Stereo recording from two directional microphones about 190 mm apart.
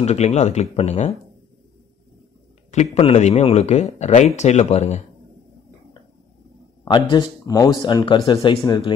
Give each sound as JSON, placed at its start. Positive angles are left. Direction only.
{"t": 0.0, "sound": "a man's voice", "side_deg": 35}
{"t": 2.7, "sound": "a man's voice", "side_deg": 35}
{"t": 6.8, "sound": "speech", "side_deg": 20}